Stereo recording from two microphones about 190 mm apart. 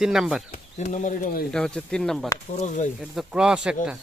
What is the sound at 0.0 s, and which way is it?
Speech, centre (ahead or behind).